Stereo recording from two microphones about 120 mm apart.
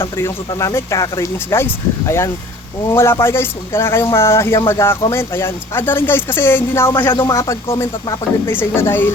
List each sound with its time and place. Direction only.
0.0 s a man's voice: 20° left (ahead or behind)